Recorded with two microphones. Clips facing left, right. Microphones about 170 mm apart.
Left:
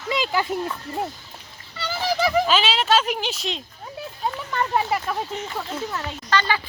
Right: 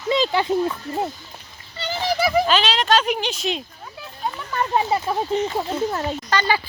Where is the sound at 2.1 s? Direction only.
10° right (ahead or behind).